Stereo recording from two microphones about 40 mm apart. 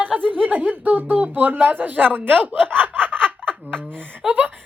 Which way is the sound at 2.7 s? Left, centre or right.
Right.